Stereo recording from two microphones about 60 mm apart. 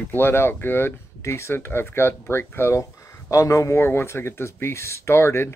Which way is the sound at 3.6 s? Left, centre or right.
Left.